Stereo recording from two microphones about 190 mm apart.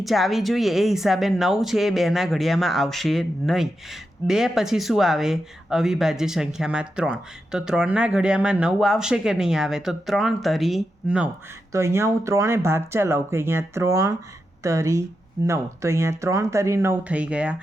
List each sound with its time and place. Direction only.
0.0 s speech: centre (ahead or behind)
11.7 s speech: 15° right (ahead or behind)